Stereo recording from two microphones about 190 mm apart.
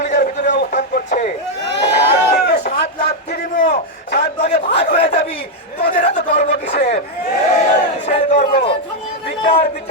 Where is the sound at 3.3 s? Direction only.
60° left (ahead or behind).